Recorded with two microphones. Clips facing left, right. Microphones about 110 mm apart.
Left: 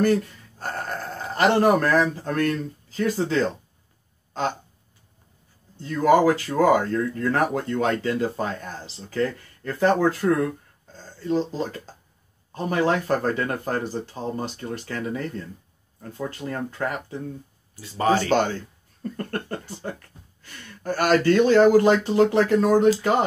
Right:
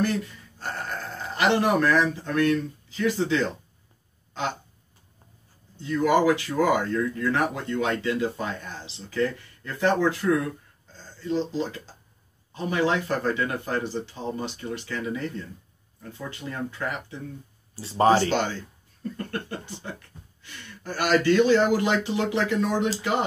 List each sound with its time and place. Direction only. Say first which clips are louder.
0.0 s speech: left 5 dB; 50° left (ahead or behind)
4.3 s a sound: left 3 dB; 40° left (ahead or behind)
5.8 s speech: left 3 dB; 40° left (ahead or behind)
17.7 s speech: right 3 dB; 30° right (ahead or behind)
18.2 s speech: left 3 dB; 50° left (ahead or behind)